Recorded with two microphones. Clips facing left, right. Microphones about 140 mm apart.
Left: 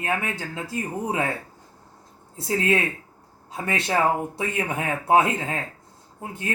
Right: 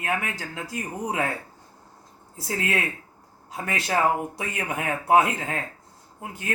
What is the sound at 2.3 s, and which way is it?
Speech, 25° left (ahead or behind).